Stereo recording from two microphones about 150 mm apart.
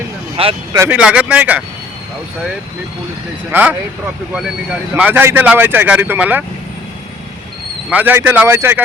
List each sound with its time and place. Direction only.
0.4 s speech: 40° right (ahead or behind)
0.9 s speech: 5° right (ahead or behind)
3.5 s speech: 10° right (ahead or behind)
4.9 s speech: 10° right (ahead or behind)
7.9 s speech: 10° right (ahead or behind)